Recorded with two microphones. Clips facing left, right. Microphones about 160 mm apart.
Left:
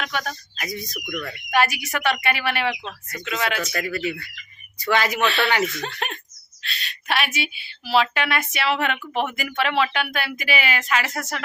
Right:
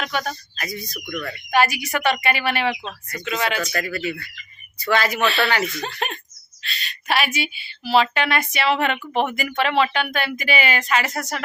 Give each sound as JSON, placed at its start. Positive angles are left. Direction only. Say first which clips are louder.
{"t": 0.0, "sound": "speech", "louder": "right 2 dB", "side_deg": 0}
{"t": 0.5, "sound": "speech", "louder": "even", "side_deg": 20}
{"t": 3.8, "sound": "speech", "louder": "even", "side_deg": 20}
{"t": 5.2, "sound": "speech", "louder": "even", "side_deg": 0}